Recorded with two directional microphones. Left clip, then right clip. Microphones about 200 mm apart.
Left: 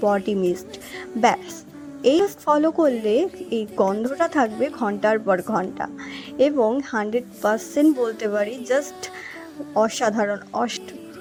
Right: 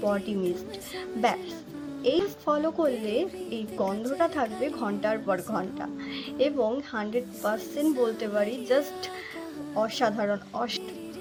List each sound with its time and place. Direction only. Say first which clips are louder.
0.0 s a woman's voice: left 8 dB; 35° left (ahead or behind)
1.2 s a woman's voice: left 8 dB; centre (ahead or behind)
2.0 s a woman's voice: left 8 dB; 35° left (ahead or behind)
7.9 s a woman's voice: left 4 dB; centre (ahead or behind)
8.2 s a woman's voice: left 5 dB; 35° left (ahead or behind)
9.7 s a woman's voice: left 6 dB; 35° left (ahead or behind)